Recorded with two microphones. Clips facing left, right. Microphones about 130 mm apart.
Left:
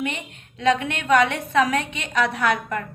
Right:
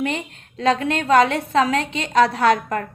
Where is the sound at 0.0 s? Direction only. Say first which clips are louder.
Right 4 dB; 35° right (ahead or behind).